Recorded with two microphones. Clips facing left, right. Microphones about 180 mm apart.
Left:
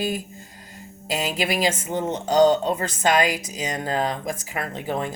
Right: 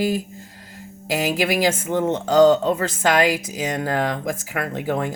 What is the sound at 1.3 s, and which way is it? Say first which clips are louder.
Speech: right 2 dB; 90° right.